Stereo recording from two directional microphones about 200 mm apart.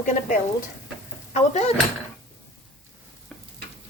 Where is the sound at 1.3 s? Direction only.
35° left (ahead or behind).